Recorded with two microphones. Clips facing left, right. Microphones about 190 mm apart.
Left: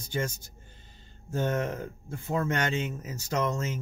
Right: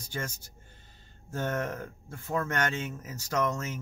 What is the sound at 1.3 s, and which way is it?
Speech, 15° left (ahead or behind).